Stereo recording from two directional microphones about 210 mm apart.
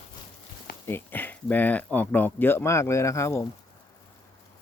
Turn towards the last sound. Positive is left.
turn(degrees=15)  # may be behind; listen again after turning